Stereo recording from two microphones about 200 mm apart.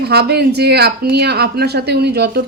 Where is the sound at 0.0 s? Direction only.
55° right (ahead or behind).